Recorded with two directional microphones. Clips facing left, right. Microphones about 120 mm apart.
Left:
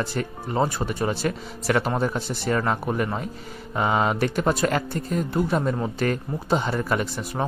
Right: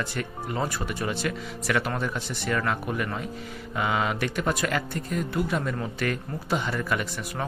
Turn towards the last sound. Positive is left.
turn(degrees=35)  # may be behind; listen again after turning